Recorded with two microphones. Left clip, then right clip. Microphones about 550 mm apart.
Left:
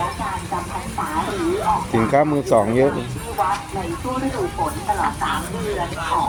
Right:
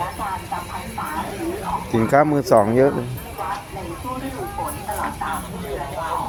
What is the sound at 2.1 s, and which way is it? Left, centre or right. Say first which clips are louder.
Speech: right 2 dB; right.